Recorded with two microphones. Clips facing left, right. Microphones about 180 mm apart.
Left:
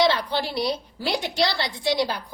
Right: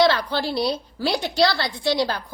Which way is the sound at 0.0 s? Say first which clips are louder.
Right 2 dB; 15° left (ahead or behind).